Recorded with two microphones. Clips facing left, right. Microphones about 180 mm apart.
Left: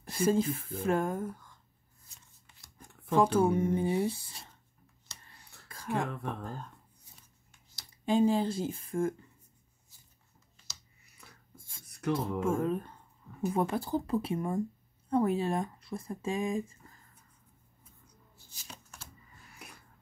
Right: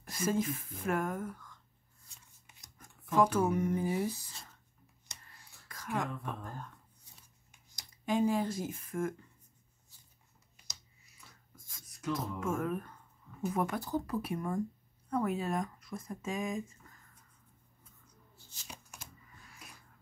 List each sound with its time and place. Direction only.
0.0 s speech: 30° left (ahead or behind)
2.4 s shuffling cards: 15° right (ahead or behind)
2.8 s speech: 30° left (ahead or behind)
5.7 s speech: 30° left (ahead or behind)
8.0 s speech: 30° left (ahead or behind)
11.5 s writing: 30° left (ahead or behind)
12.4 s speech: 30° left (ahead or behind)
18.7 s shuffling cards: 15° right (ahead or behind)